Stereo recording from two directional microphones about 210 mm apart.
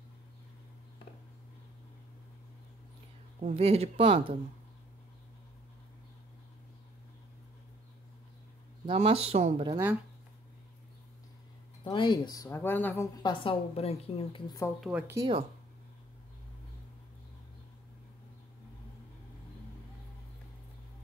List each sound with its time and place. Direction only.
3.3 s speech: 30° right (ahead or behind)
8.8 s speech: 30° right (ahead or behind)
11.8 s speech: 20° left (ahead or behind)
14.8 s speech: 5° right (ahead or behind)